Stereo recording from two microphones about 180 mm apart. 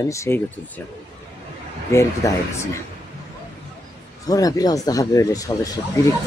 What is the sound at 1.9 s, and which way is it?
Speech, 15° left (ahead or behind).